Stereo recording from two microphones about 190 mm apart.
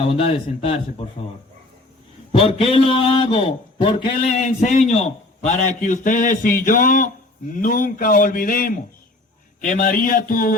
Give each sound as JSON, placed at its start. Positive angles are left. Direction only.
{"t": 0.0, "sound": "speech", "side_deg": 30}
{"t": 2.3, "sound": "a man's voice", "side_deg": 30}